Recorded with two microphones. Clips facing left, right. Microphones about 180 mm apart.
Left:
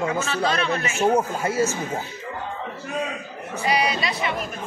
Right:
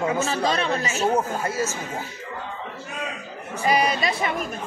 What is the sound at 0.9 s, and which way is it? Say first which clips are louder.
Speech: left 4 dB; 10° left (ahead or behind).